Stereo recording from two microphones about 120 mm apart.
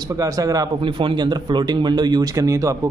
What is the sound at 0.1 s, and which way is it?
Speech, 30° right (ahead or behind).